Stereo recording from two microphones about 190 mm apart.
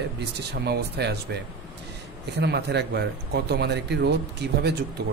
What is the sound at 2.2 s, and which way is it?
Speech, 60° right (ahead or behind).